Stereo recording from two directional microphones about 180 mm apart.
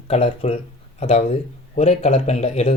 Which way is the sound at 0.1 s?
35° left (ahead or behind).